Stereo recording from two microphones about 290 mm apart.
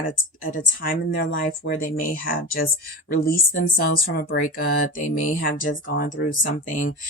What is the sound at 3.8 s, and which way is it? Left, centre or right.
Speech, left.